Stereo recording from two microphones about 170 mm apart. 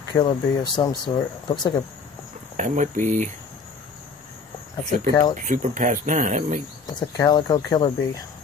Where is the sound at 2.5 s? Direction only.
45° right (ahead or behind).